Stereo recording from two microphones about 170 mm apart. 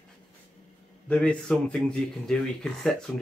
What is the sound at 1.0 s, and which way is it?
Speech, 5° left (ahead or behind).